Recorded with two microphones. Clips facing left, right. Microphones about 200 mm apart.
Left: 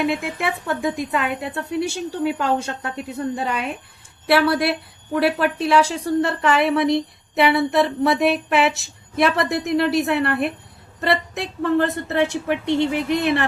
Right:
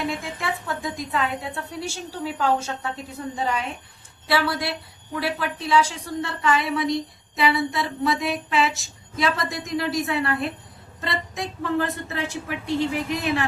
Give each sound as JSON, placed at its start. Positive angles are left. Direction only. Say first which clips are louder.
{"t": 0.0, "sound": "a woman's voice", "louder": "left 6 dB", "side_deg": 60}